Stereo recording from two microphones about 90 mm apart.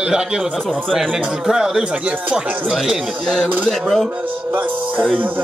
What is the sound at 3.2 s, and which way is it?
Speech, 10° left (ahead or behind).